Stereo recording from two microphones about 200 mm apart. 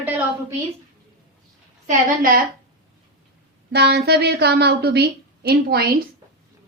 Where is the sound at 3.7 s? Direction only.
55° right (ahead or behind).